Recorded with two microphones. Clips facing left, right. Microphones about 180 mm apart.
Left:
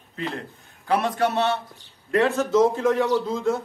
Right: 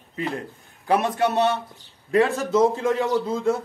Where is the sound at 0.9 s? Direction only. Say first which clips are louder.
Right 1 dB; 15° right (ahead or behind).